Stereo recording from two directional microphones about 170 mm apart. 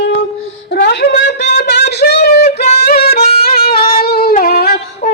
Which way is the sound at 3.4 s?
65° left (ahead or behind).